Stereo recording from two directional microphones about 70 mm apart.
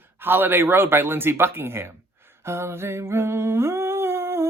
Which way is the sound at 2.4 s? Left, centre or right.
Right.